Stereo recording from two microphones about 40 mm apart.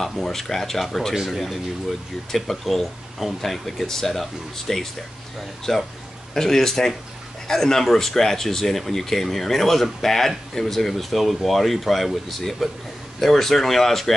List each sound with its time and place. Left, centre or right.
0.0 s speech: centre